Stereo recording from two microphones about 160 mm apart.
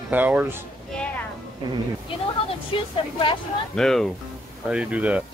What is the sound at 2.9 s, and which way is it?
Speech, 30° left (ahead or behind).